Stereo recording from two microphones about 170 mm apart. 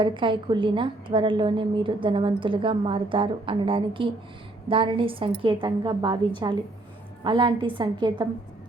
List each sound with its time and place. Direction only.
0.0 s a woman's voice: 30° right (ahead or behind)